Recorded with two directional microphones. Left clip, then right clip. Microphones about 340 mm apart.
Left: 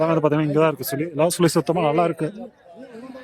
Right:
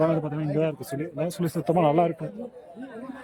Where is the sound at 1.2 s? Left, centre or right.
Centre.